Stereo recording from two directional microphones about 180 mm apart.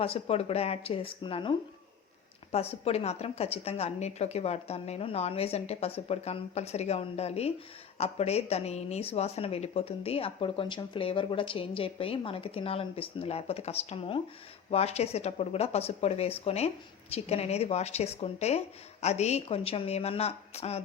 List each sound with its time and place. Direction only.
0.0 s speech: 35° left (ahead or behind)